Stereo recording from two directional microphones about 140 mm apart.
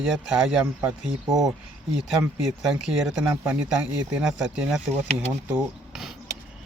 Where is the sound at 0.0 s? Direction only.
5° right (ahead or behind).